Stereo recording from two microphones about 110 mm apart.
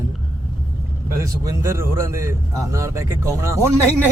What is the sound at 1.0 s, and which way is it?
A man's voice, 30° right (ahead or behind).